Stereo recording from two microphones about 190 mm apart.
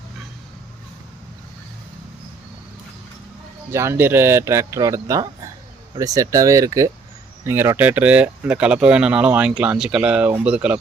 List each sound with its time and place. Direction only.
3.7 s speech: 15° right (ahead or behind)